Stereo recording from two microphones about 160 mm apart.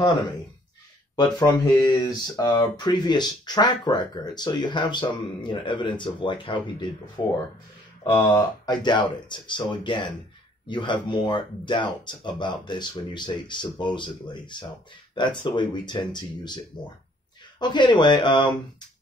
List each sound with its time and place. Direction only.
1.1 s speech: 25° left (ahead or behind)